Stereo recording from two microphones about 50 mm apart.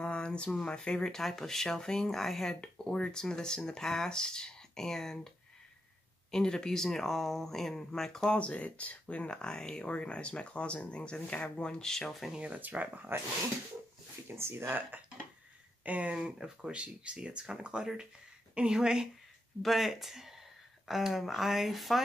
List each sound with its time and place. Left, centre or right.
0.0 s a sound: centre
0.6 s speech: centre
6.3 s speech: centre
8.4 s speech: left
11.8 s speech: centre
12.5 s speech: right
14.3 s speech: right
14.9 s speech: right
16.2 s speech: centre
19.6 s speech: centre